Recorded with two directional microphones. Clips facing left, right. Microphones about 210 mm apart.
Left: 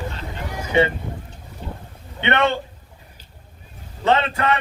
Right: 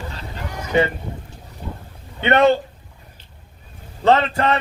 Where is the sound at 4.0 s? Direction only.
35° right (ahead or behind).